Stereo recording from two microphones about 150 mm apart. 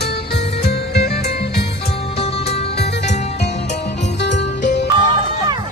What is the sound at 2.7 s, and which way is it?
Music, 90° left.